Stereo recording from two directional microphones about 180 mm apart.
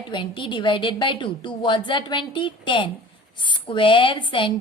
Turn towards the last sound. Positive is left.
turn(degrees=30)  # may be behind; listen again after turning